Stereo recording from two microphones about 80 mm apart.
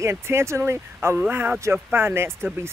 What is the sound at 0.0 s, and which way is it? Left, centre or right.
Speech, right.